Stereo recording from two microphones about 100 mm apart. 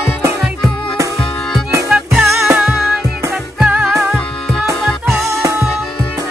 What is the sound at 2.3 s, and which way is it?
Music, 25° right (ahead or behind).